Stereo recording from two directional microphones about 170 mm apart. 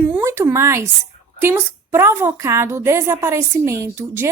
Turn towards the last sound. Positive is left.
turn(degrees=-15)  # may be behind; listen again after turning